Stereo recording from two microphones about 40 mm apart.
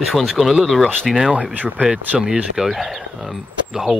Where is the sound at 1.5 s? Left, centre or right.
Right.